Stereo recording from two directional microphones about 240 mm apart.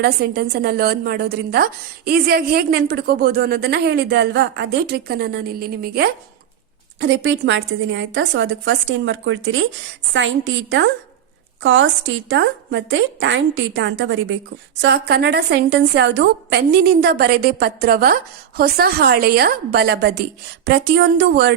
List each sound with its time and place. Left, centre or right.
0.0 s a woman's voice: right